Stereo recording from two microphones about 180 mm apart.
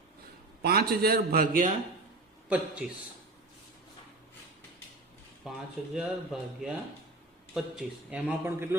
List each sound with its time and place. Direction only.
0.6 s a man's voice: 60° right (ahead or behind)
2.5 s speech: 5° right (ahead or behind)
5.5 s a man's voice: centre (ahead or behind)